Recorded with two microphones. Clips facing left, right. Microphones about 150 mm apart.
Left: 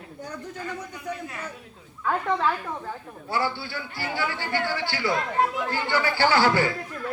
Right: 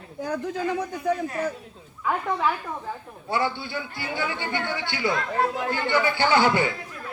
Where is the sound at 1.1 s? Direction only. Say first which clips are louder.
Right 8 dB; 40° right (ahead or behind).